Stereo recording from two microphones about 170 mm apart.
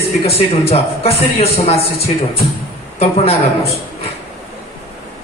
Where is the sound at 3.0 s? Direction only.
35° left (ahead or behind).